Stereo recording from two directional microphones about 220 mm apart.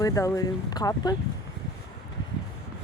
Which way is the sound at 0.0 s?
15° left (ahead or behind).